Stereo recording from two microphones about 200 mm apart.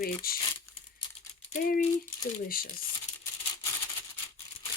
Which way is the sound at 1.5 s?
45° left (ahead or behind).